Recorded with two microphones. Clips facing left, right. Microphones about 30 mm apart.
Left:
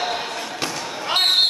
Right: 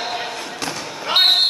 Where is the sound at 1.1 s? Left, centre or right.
Centre.